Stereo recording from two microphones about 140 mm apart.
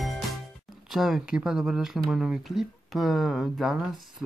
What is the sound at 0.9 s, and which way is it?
Speech, 5° right (ahead or behind).